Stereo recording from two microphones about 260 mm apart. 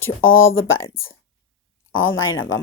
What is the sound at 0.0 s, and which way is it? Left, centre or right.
Speech, left.